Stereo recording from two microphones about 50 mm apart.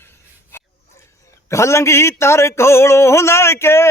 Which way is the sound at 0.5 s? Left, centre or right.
Left.